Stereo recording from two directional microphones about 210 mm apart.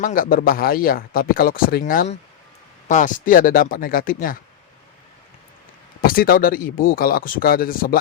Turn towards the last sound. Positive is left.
turn(degrees=45)  # may be behind; listen again after turning